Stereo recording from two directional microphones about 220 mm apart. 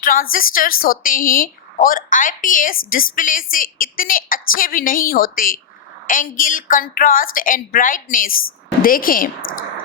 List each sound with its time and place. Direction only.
0.0 s a woman's voice: 40° left (ahead or behind)
8.3 s a woman's voice: 65° left (ahead or behind)
8.8 s a woman's voice: 40° left (ahead or behind)